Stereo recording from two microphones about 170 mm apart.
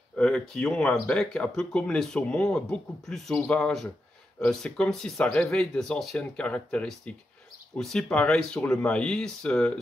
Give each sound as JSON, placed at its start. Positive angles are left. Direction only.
{"t": 0.2, "sound": "speech", "side_deg": 5}